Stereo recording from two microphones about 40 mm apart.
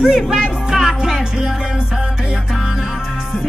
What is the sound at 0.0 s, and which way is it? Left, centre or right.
Music, centre.